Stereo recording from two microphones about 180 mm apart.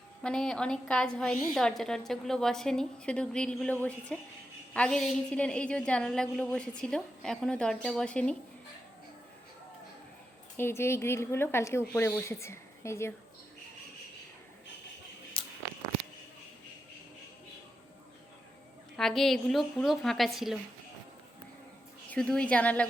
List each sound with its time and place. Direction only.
0.2 s a woman's voice: 5° left (ahead or behind)
10.6 s speech: 15° left (ahead or behind)
15.3 s a sound: 30° left (ahead or behind)
18.9 s a woman's voice: centre (ahead or behind)
22.1 s speech: 5° left (ahead or behind)